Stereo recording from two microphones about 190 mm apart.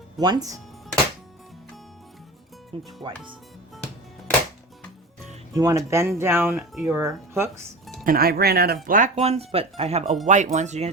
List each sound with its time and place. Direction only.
0.2 s speech: 20° right (ahead or behind)
3.0 s speech: 25° right (ahead or behind)
5.5 s speech: 20° right (ahead or behind)
6.6 s a sound: centre (ahead or behind)
6.9 s speech: 15° right (ahead or behind)
8.0 s speech: 50° right (ahead or behind)
9.1 s speech: 35° right (ahead or behind)